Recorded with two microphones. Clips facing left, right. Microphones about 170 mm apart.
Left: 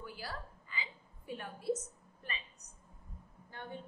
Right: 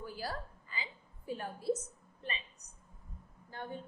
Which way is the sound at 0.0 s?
40° right (ahead or behind).